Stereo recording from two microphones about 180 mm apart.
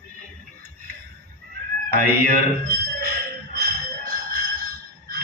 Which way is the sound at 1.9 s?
55° right (ahead or behind).